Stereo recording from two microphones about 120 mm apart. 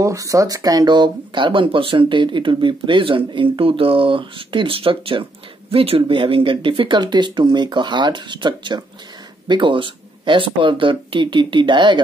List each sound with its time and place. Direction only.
0.0 s speech: 25° right (ahead or behind)